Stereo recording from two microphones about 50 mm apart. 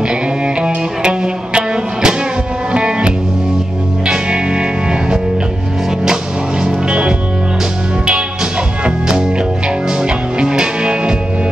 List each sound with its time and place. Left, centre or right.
0.1 s music: centre
6.6 s music: centre
8.8 s music: centre